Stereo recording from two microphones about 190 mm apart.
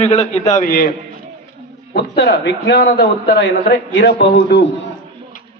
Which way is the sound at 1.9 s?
55° left (ahead or behind).